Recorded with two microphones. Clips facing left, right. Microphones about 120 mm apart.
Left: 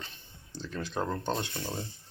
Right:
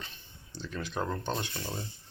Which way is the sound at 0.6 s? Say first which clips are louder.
Left 1 dB; 30° left (ahead or behind).